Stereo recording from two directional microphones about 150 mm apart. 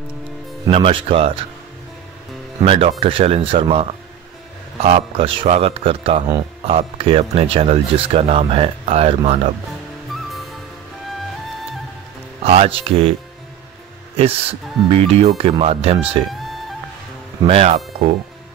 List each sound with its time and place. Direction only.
0.7 s speech: 40° right (ahead or behind)
2.6 s speech: 40° right (ahead or behind)
4.8 s speech: 40° right (ahead or behind)
10.1 s music: centre (ahead or behind)
12.4 s speech: 40° right (ahead or behind)
14.9 s speech: 40° right (ahead or behind)
16.3 s music: centre (ahead or behind)
17.4 s speech: 40° right (ahead or behind)